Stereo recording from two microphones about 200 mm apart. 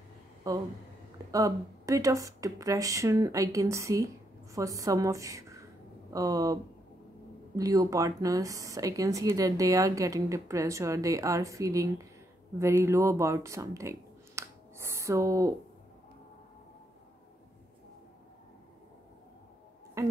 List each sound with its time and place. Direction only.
0.5 s speech: 15° right (ahead or behind)
20.0 s speech: 15° right (ahead or behind)